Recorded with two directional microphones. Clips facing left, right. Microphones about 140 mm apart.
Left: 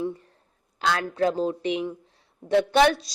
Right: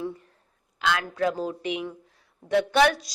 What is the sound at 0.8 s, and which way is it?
A woman's voice, 35° left (ahead or behind).